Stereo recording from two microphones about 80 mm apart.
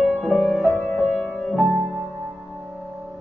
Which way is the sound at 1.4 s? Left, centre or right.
Centre.